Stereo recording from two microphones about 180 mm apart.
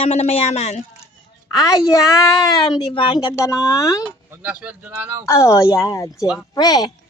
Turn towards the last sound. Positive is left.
turn(degrees=20)  # may be behind; listen again after turning